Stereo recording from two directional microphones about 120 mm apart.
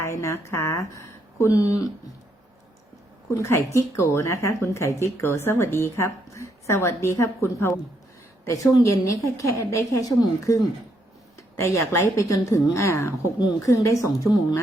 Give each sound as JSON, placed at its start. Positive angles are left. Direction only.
{"t": 0.0, "sound": "speech", "side_deg": 25}
{"t": 3.2, "sound": "a woman's voice", "side_deg": 25}
{"t": 11.6, "sound": "a woman's voice", "side_deg": 25}